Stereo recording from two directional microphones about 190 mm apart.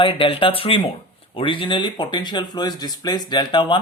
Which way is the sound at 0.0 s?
25° left (ahead or behind).